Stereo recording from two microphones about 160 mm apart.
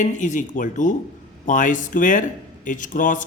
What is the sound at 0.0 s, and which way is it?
Speech, 50° left (ahead or behind).